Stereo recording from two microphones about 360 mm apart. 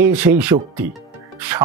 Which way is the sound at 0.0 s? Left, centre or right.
Centre.